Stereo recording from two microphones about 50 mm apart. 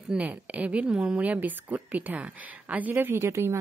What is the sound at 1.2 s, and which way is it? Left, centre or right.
Speech, right.